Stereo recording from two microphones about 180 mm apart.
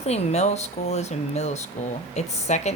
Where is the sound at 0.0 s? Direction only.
35° left (ahead or behind).